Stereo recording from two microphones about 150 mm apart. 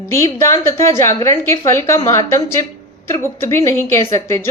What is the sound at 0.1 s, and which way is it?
A woman's voice, 20° left (ahead or behind).